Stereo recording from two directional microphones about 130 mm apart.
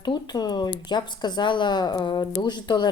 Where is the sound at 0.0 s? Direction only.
35° left (ahead or behind).